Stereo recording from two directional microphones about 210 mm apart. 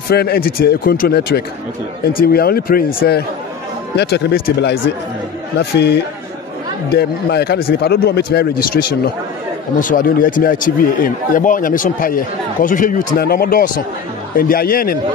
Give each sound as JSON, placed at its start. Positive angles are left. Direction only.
{"t": 0.1, "sound": "a man's voice", "side_deg": 45}